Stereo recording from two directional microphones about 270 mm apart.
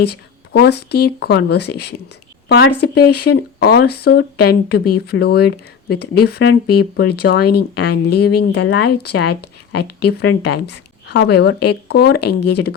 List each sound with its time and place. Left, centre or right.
0.0 s a woman's voice: left